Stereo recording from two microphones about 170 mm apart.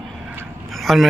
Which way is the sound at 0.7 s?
Centre (ahead or behind).